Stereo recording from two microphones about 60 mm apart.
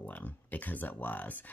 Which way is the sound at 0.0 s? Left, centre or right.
Left.